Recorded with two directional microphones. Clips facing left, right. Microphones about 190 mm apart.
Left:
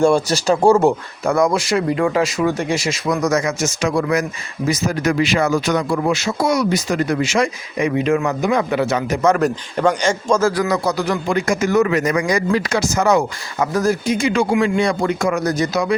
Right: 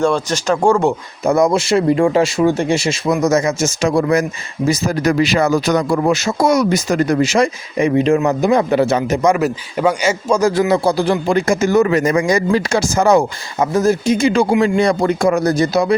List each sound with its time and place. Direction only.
0.0 s speech: 10° left (ahead or behind)
1.2 s speech: 20° right (ahead or behind)
9.2 s a man's voice: 10° right (ahead or behind)
10.5 s a man's voice: 25° right (ahead or behind)